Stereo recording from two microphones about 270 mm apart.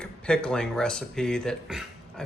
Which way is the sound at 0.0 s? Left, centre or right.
Centre.